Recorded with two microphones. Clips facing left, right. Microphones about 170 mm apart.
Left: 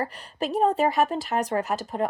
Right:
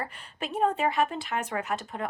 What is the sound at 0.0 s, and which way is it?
A woman's voice, 35° left (ahead or behind).